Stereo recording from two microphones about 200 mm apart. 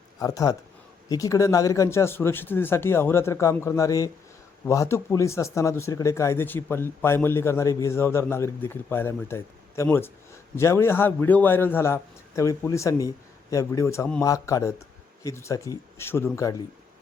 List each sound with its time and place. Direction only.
0.2 s speech: 15° left (ahead or behind)